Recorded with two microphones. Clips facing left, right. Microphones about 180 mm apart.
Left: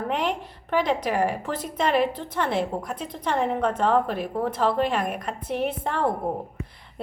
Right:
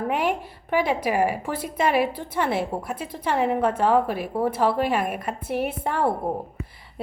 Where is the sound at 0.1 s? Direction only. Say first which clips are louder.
Right 1 dB; 10° right (ahead or behind).